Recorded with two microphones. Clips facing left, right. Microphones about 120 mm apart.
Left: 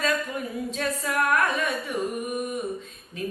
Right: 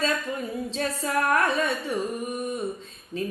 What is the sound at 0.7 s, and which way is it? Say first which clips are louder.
A woman's voice: right 2 dB; 30° right (ahead or behind).